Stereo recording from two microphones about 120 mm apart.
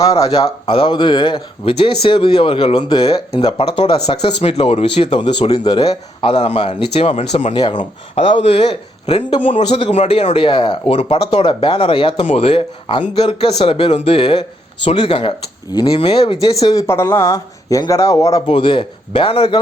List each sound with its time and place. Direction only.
0.0 s speech: 30° left (ahead or behind)
0.3 s speech: 55° left (ahead or behind)
5.1 s speech: 40° left (ahead or behind)
6.3 s speech: 65° left (ahead or behind)
6.7 s speech: 55° left (ahead or behind)
7.5 s speech: 40° left (ahead or behind)
8.1 s speech: 60° left (ahead or behind)
9.3 s speech: 50° left (ahead or behind)
9.9 s speech: 60° left (ahead or behind); by 15.9 s 40° left (ahead or behind)
15.9 s speech: 50° left (ahead or behind)
16.8 s speech: 20° left (ahead or behind)
18.4 s speech: 40° left (ahead or behind)